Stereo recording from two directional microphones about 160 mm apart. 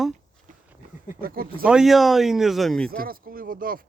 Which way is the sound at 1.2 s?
65° right (ahead or behind).